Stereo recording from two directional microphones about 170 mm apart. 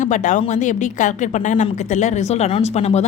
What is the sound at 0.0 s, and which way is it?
A woman's voice, 45° left (ahead or behind).